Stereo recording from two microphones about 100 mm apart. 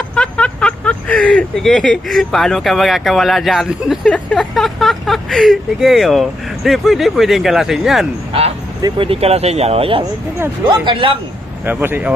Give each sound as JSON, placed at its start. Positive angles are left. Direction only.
{"t": 0.1, "sound": "speech", "side_deg": 10}
{"t": 8.3, "sound": "speech", "side_deg": -90}
{"t": 9.0, "sound": "speech", "side_deg": -80}
{"t": 10.7, "sound": "speech", "side_deg": -55}
{"t": 11.6, "sound": "speech", "side_deg": -20}